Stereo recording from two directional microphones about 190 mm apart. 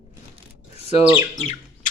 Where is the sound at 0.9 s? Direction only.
35° left (ahead or behind).